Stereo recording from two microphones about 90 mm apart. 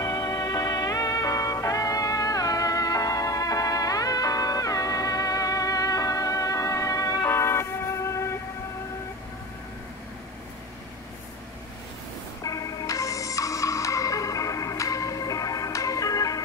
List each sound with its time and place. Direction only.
0.0 s music: 40° left (ahead or behind)
7.2 s vehicle: 30° left (ahead or behind)
12.4 s music: 40° left (ahead or behind)